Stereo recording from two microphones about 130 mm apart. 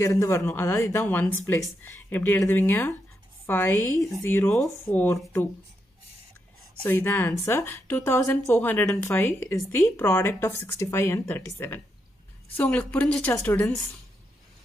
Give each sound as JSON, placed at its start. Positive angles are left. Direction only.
{"t": 0.0, "sound": "speech", "side_deg": 25}
{"t": 6.8, "sound": "speech", "side_deg": 15}